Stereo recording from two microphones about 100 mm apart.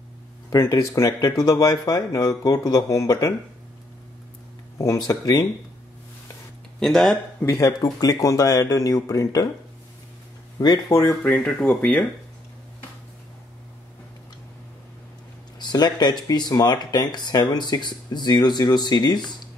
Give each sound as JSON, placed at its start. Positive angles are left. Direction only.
{"t": 0.6, "sound": "speech", "side_deg": 30}
{"t": 4.7, "sound": "speech", "side_deg": 35}
{"t": 6.8, "sound": "speech", "side_deg": 5}
{"t": 7.5, "sound": "speech", "side_deg": 40}
{"t": 10.9, "sound": "speech", "side_deg": 30}
{"t": 11.3, "sound": "speech", "side_deg": 15}
{"t": 15.6, "sound": "speech", "side_deg": 45}